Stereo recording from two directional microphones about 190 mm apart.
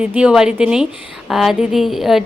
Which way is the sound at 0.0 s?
5° right (ahead or behind).